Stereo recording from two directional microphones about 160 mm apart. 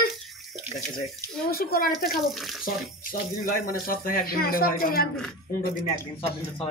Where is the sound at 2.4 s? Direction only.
Centre (ahead or behind).